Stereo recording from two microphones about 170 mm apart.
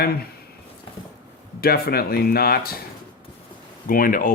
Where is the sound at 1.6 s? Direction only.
65° left (ahead or behind).